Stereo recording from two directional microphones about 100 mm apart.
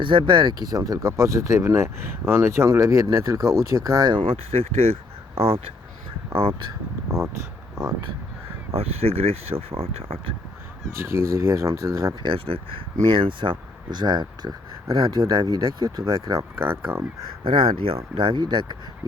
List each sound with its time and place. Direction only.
0.0 s speech: 55° right (ahead or behind); by 4.2 s 40° right (ahead or behind)
4.2 s speech: 70° right (ahead or behind)
8.7 s speech: 90° right
11.0 s speech: 30° right (ahead or behind)
12.2 s speech: 60° right (ahead or behind); by 16.5 s 35° right (ahead or behind)
16.6 s speech: 20° right (ahead or behind)
17.4 s speech: 60° right (ahead or behind)